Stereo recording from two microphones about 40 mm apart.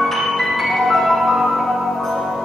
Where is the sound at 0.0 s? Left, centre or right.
Centre.